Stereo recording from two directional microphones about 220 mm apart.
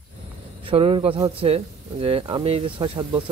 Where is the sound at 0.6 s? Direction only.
25° right (ahead or behind).